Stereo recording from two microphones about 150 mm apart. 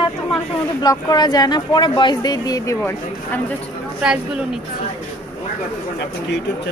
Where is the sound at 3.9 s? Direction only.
5° right (ahead or behind).